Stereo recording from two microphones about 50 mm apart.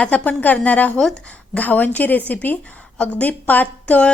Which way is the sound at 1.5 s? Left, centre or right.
Left.